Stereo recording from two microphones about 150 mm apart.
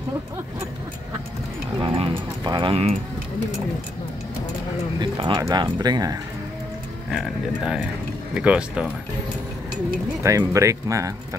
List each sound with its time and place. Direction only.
1.8 s a sound: 35° right (ahead or behind)
5.0 s speech: 30° right (ahead or behind)
7.1 s speech: 5° right (ahead or behind)
10.2 s speech: 20° right (ahead or behind)